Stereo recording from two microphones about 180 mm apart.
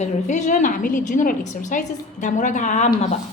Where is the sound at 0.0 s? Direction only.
40° left (ahead or behind).